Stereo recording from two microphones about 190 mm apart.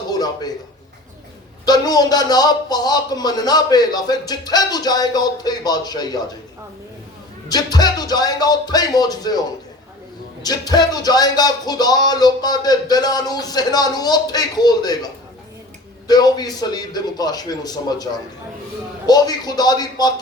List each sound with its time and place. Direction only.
0.1 s a sound: 20° left (ahead or behind)
1.6 s speech: 20° left (ahead or behind)
7.5 s speech: 20° left (ahead or behind)
10.4 s speech: 20° left (ahead or behind)